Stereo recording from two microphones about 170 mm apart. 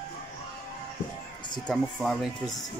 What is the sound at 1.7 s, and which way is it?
Speech, centre (ahead or behind).